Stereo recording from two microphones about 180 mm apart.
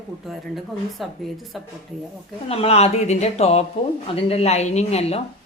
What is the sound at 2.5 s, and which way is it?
Speech, 35° left (ahead or behind).